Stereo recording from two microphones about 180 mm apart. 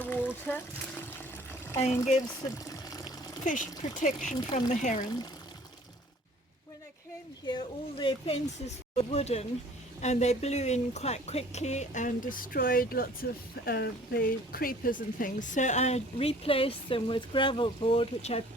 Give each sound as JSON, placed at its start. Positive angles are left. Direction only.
{"t": 0.0, "sound": "a sound", "side_deg": 10}
{"t": 1.8, "sound": "speech", "side_deg": 40}
{"t": 2.6, "sound": "water", "side_deg": 20}
{"t": 3.4, "sound": "speech", "side_deg": 45}
{"t": 7.4, "sound": "speech", "side_deg": 25}